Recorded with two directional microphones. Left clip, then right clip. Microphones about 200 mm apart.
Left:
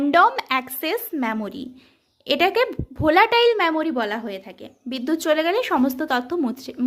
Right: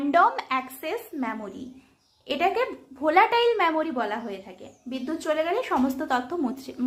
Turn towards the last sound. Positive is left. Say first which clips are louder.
# left 4 dB
turn(degrees=40)  # may be behind; listen again after turning